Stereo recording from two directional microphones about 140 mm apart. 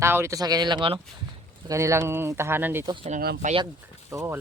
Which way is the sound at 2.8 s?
35° right (ahead or behind).